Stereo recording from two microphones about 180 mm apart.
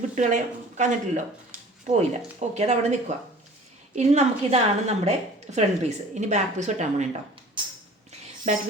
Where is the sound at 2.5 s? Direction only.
40° right (ahead or behind).